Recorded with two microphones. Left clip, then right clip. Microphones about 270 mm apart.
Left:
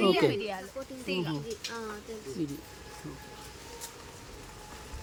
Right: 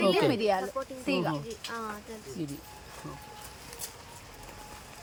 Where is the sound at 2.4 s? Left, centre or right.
Centre.